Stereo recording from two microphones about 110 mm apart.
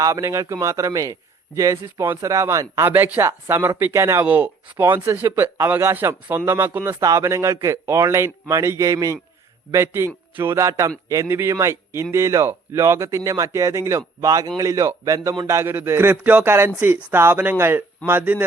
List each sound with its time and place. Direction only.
0.0 s speech: 30° right (ahead or behind)